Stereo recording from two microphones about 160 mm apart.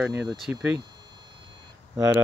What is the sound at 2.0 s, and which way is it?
Speech, 10° right (ahead or behind).